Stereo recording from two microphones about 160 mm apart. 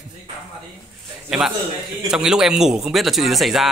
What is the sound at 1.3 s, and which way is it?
A man's voice, 5° right (ahead or behind).